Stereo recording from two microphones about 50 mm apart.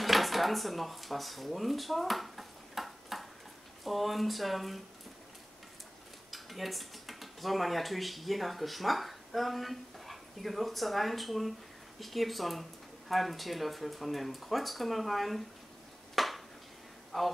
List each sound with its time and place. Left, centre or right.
0.0 s drawer open or close: centre
3.8 s speech: centre
6.3 s speech: centre
16.2 s a sound: centre
17.1 s speech: centre